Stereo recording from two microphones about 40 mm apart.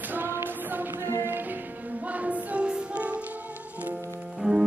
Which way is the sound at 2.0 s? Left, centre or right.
Right.